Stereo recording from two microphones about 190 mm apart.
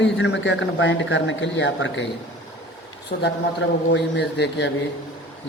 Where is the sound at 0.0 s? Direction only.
70° left (ahead or behind).